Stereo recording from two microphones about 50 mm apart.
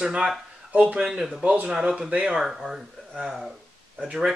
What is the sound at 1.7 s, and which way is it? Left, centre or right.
Speech, centre.